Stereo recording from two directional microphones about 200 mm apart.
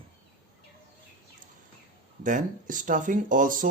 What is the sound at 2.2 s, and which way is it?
Speech, 40° right (ahead or behind).